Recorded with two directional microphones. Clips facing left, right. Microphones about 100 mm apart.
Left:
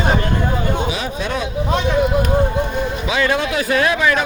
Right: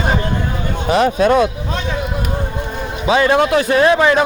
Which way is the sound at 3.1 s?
30° right (ahead or behind).